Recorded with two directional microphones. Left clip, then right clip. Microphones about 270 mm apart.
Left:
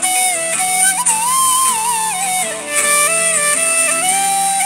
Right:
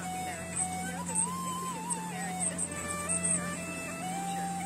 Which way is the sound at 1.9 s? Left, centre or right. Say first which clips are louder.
Left 19 dB; left.